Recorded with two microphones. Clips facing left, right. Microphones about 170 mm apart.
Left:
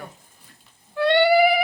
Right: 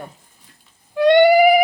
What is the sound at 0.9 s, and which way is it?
Cat, 15° right (ahead or behind).